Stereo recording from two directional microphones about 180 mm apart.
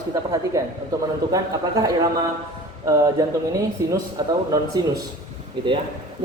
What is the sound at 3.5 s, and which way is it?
A man's voice, 20° right (ahead or behind).